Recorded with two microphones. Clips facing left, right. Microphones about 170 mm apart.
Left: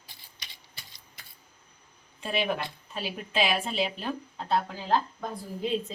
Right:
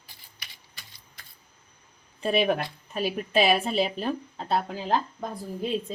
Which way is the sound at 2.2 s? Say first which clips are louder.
Right 5 dB; 45° right (ahead or behind).